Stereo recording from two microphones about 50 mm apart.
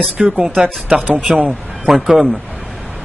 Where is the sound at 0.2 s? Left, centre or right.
Centre.